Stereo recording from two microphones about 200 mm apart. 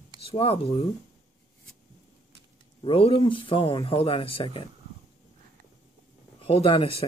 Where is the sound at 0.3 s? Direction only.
30° left (ahead or behind).